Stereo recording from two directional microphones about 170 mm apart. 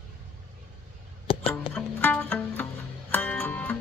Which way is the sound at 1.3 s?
30° left (ahead or behind).